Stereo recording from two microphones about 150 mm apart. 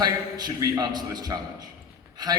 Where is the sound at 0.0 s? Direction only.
25° right (ahead or behind).